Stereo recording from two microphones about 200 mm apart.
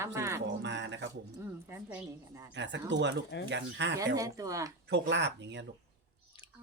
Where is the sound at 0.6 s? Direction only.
60° right (ahead or behind).